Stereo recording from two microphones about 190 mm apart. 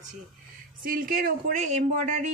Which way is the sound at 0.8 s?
50° right (ahead or behind).